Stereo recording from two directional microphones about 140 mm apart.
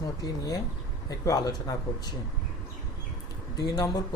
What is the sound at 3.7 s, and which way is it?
Speech, 25° left (ahead or behind).